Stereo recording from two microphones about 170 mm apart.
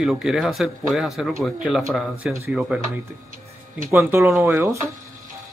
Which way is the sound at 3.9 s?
15° right (ahead or behind).